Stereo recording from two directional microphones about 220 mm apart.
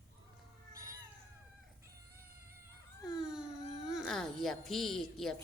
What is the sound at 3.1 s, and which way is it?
Speech, 5° right (ahead or behind).